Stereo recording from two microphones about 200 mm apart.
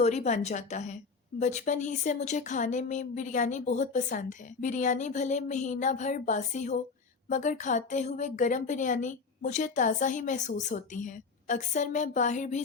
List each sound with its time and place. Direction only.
0.0 s speech: 35° left (ahead or behind)